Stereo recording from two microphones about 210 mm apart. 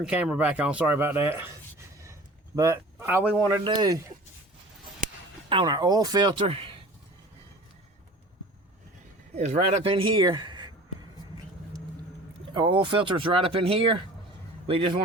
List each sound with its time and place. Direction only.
0.0 s speech: 5° right (ahead or behind)
2.6 s speech: 15° right (ahead or behind)
5.5 s speech: 20° right (ahead or behind)
9.3 s speech: 30° right (ahead or behind)
12.5 s speech: 25° right (ahead or behind)